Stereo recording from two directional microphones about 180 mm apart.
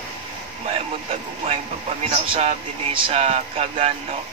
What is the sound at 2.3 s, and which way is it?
Speech, 30° right (ahead or behind).